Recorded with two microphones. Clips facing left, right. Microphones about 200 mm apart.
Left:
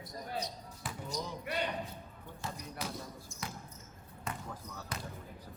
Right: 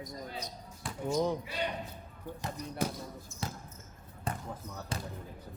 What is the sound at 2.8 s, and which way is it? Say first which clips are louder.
Speech: right 8 dB; 50° right (ahead or behind).